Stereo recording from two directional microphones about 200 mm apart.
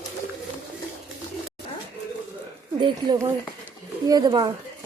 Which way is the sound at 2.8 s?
20° right (ahead or behind).